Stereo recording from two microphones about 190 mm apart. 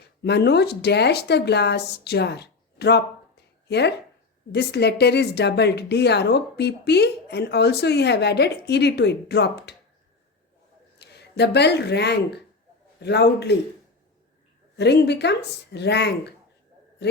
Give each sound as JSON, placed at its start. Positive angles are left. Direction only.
{"t": 0.2, "sound": "a woman's voice", "side_deg": 60}
{"t": 11.0, "sound": "a woman's voice", "side_deg": 60}
{"t": 14.8, "sound": "a woman's voice", "side_deg": 60}